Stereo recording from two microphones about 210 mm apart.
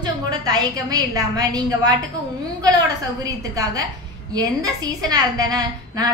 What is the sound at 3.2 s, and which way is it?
A woman's voice, 15° right (ahead or behind).